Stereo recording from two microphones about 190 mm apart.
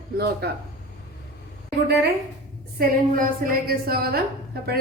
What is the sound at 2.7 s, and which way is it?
A woman's voice, 45° right (ahead or behind).